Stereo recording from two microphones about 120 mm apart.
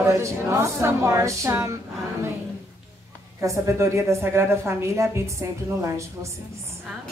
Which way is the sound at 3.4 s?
25° right (ahead or behind).